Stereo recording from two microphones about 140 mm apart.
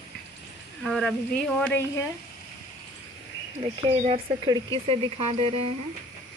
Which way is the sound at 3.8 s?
45° right (ahead or behind).